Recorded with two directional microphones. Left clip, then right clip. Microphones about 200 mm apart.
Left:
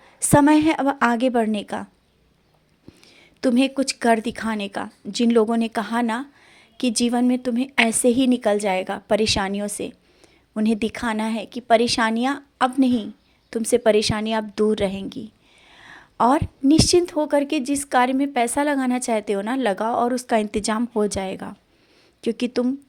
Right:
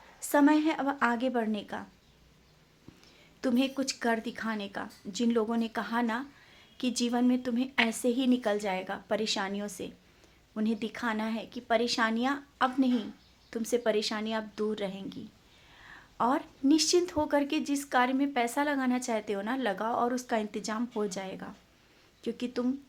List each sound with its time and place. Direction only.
0.2 s a woman's voice: 40° left (ahead or behind)
3.1 s a woman's voice: 35° left (ahead or behind)